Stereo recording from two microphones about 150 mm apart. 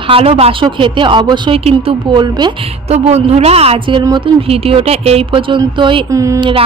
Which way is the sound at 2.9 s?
45° right (ahead or behind).